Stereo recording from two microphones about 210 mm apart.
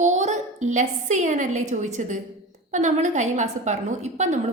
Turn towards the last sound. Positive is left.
turn(degrees=-35)  # may be behind; listen again after turning